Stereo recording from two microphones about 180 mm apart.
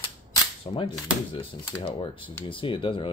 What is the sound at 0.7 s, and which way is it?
Speech, 25° left (ahead or behind).